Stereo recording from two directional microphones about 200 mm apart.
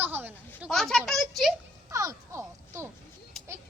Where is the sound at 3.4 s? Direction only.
Centre (ahead or behind).